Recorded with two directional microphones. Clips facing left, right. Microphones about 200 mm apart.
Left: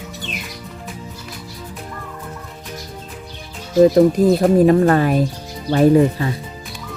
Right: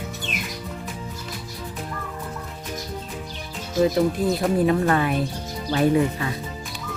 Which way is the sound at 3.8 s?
45° left (ahead or behind).